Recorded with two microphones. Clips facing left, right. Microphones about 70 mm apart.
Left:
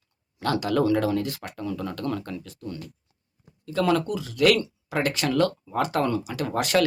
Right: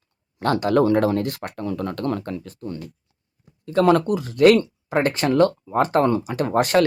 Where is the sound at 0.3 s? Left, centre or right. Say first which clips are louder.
Right 5 dB; right.